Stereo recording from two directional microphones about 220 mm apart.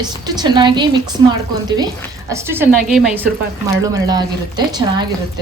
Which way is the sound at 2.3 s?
10° right (ahead or behind).